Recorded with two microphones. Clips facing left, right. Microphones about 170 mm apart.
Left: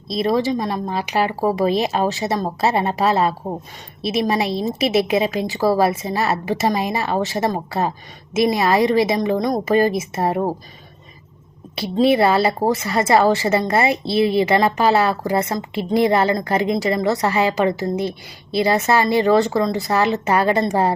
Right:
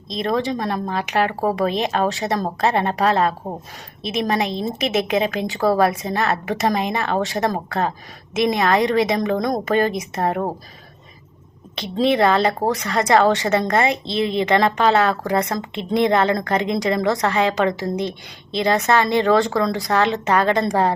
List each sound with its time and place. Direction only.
0.1 s speech: 5° left (ahead or behind)
11.8 s speech: 5° left (ahead or behind)